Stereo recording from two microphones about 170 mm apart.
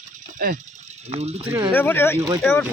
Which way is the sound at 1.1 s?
35° right (ahead or behind).